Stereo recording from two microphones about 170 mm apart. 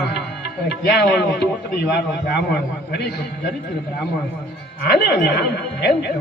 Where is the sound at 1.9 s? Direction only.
70° left (ahead or behind).